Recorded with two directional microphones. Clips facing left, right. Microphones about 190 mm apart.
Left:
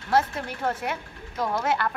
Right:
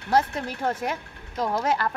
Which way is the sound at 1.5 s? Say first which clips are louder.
Right 1 dB; 35° right (ahead or behind).